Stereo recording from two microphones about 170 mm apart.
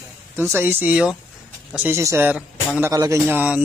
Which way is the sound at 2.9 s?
20° right (ahead or behind).